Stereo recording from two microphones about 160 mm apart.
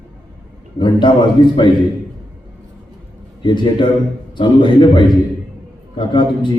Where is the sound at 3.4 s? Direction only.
30° left (ahead or behind).